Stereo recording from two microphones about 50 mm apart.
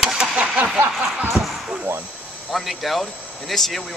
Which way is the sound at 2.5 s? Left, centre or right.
Centre.